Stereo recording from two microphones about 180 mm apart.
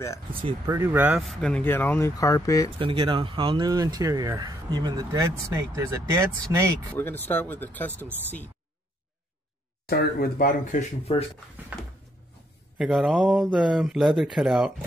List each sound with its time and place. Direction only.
0.4 s speech: 30° right (ahead or behind)
0.7 s speech: 10° right (ahead or behind); by 2.7 s 20° left (ahead or behind)
2.8 s speech: 30° right (ahead or behind)
7.2 s speech: 10° left (ahead or behind)
9.8 s speech: 60° left (ahead or behind); by 11.2 s 40° left (ahead or behind)
12.7 s speech: centre (ahead or behind)